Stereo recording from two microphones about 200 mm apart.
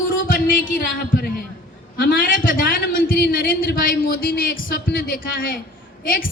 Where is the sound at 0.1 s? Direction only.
45° left (ahead or behind).